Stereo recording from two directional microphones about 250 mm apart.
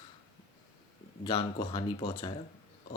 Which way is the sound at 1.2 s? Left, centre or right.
Centre.